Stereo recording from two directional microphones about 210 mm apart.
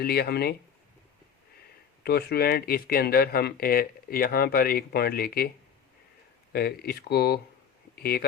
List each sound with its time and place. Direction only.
0.0 s speech: 45° left (ahead or behind)
2.0 s speech: 50° left (ahead or behind)
6.5 s speech: 45° left (ahead or behind)